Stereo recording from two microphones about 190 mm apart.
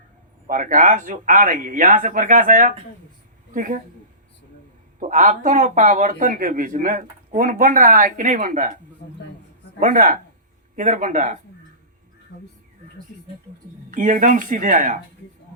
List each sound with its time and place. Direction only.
0.4 s speech: 45° right (ahead or behind)
4.9 s speech: 40° right (ahead or behind)
9.8 s speech: 45° right (ahead or behind)
13.9 s speech: 45° right (ahead or behind)